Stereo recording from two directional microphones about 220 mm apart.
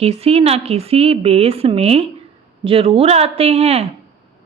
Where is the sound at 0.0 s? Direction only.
30° right (ahead or behind).